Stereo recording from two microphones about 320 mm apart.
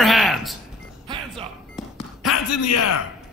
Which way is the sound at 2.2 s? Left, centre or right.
Left.